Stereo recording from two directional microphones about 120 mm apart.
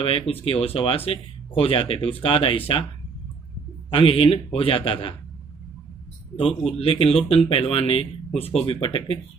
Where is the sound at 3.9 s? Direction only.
50° left (ahead or behind).